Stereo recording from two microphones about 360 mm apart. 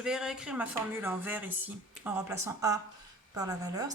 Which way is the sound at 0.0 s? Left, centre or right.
Centre.